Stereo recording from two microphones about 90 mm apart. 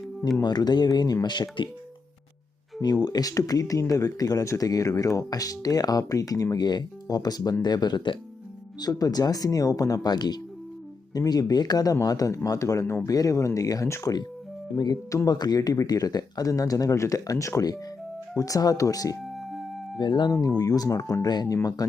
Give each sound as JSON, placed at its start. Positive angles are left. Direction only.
{"t": 0.4, "sound": "speech", "side_deg": 50}
{"t": 2.8, "sound": "speech", "side_deg": 45}
{"t": 8.8, "sound": "speech", "side_deg": 45}
{"t": 12.8, "sound": "speech", "side_deg": 25}
{"t": 13.1, "sound": "speech", "side_deg": 40}
{"t": 14.7, "sound": "speech", "side_deg": 0}
{"t": 15.3, "sound": "speech", "side_deg": 50}
{"t": 19.2, "sound": "music", "side_deg": 0}
{"t": 20.0, "sound": "speech", "side_deg": 60}
{"t": 20.6, "sound": "speech", "side_deg": 45}